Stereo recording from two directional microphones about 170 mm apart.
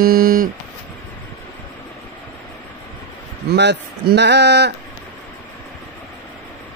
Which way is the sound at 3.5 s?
80° right.